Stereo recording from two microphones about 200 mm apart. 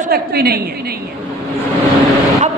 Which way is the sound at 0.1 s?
50° right (ahead or behind).